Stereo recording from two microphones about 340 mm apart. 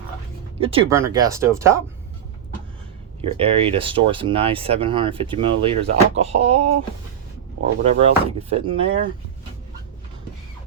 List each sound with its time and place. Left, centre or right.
0.6 s speech: centre
3.2 s speech: centre
7.9 s speech: centre